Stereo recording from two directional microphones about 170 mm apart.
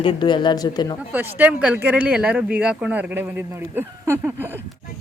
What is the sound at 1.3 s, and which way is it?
Speech, 10° right (ahead or behind).